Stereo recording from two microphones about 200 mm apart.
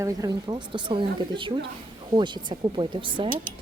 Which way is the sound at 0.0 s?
15° right (ahead or behind).